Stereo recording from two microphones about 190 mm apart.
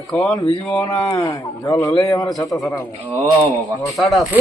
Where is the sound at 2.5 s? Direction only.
Centre (ahead or behind).